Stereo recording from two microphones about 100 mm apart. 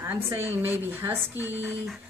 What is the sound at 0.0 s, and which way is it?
A woman's voice, 25° right (ahead or behind).